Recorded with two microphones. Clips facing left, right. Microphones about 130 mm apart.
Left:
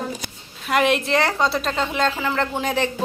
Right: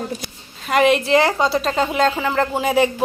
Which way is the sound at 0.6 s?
Centre (ahead or behind).